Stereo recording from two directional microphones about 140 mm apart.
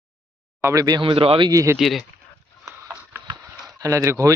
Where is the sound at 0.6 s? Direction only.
25° right (ahead or behind); by 1.5 s 40° right (ahead or behind).